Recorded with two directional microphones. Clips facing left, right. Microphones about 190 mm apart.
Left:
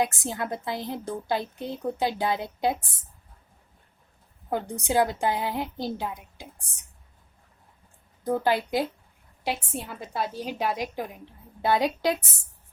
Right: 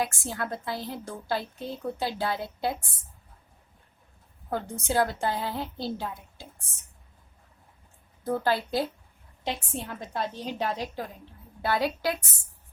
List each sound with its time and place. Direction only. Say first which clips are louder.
0.0 s a woman's voice: left 3 dB; 20° left (ahead or behind)
4.4 s a woman's voice: left 2 dB; 15° left (ahead or behind)
8.2 s a woman's voice: left 2 dB; 15° left (ahead or behind)